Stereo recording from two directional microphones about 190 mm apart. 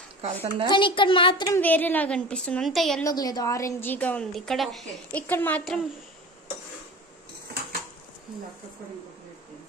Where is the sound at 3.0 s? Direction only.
20° left (ahead or behind).